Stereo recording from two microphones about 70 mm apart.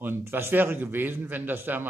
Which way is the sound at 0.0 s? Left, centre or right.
Right.